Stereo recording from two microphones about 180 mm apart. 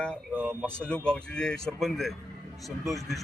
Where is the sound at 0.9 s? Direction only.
5° left (ahead or behind).